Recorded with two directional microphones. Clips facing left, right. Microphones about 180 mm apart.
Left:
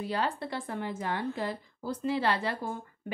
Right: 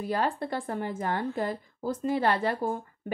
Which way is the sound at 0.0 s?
50° right (ahead or behind).